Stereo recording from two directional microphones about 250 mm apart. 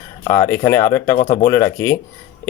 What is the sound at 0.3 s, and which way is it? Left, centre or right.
Speech, centre.